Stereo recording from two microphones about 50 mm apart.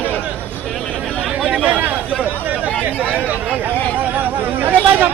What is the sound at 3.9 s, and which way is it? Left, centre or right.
Chatter, right.